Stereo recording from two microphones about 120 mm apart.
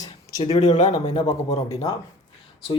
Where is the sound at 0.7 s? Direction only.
75° left (ahead or behind).